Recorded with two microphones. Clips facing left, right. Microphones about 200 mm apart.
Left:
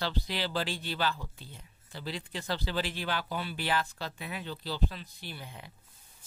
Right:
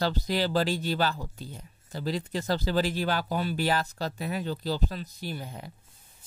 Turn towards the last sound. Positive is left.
turn(degrees=-40)  # may be behind; listen again after turning